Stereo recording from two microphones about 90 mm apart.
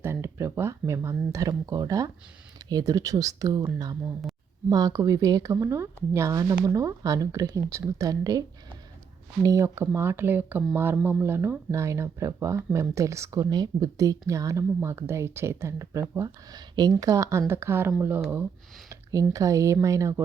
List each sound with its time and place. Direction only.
0.0 s speech: 25° right (ahead or behind)
4.7 s speech: 45° right (ahead or behind)
9.6 s speech: 25° right (ahead or behind)
16.7 s speech: 50° right (ahead or behind); by 17.9 s 25° right (ahead or behind)
18.9 s speech: 40° right (ahead or behind)